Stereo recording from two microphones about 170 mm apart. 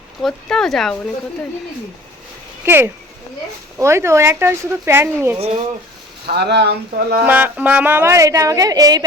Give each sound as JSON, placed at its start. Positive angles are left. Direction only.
{"t": 0.2, "sound": "speech", "side_deg": 0}
{"t": 2.6, "sound": "a woman's voice", "side_deg": -15}
{"t": 6.2, "sound": "speech", "side_deg": -75}
{"t": 7.3, "sound": "a woman's voice", "side_deg": -10}